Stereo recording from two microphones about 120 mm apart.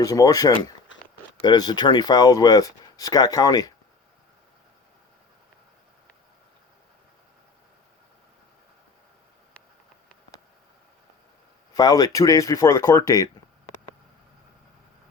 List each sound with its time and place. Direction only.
0.0 s speech: 30° left (ahead or behind)
11.7 s speech: 30° left (ahead or behind)